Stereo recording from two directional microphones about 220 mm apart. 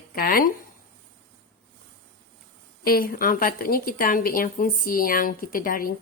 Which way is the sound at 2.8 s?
40° left (ahead or behind).